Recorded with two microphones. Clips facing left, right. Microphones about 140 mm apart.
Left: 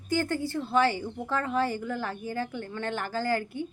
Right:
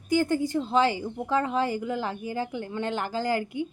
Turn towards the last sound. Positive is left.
turn(degrees=-15)  # may be behind; listen again after turning